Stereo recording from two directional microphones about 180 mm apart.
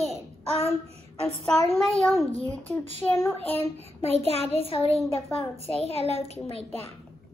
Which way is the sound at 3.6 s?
35° left (ahead or behind).